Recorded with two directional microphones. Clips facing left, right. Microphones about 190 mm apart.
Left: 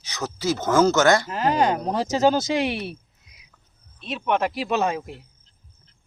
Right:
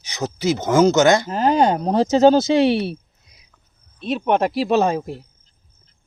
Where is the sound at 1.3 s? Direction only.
35° right (ahead or behind).